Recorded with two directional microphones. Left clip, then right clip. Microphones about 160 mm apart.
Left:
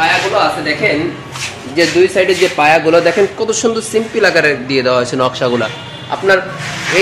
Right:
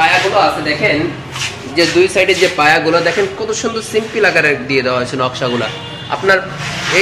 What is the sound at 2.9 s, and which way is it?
Speech, 80° left.